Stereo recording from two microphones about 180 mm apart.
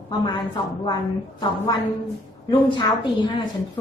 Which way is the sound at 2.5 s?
25° left (ahead or behind).